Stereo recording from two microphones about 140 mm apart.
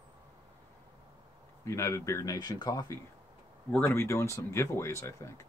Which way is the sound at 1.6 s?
20° left (ahead or behind).